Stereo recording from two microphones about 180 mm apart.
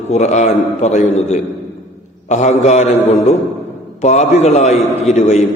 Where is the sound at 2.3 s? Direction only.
40° left (ahead or behind).